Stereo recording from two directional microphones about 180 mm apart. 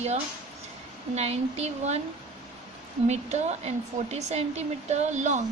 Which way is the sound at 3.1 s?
35° right (ahead or behind).